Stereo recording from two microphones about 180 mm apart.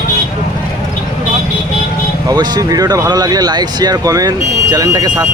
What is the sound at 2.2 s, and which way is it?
Speech, 25° right (ahead or behind).